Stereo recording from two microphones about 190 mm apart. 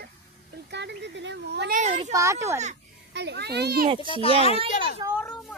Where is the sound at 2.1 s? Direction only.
15° right (ahead or behind).